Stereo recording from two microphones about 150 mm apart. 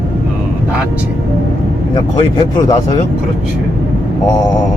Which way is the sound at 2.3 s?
25° left (ahead or behind).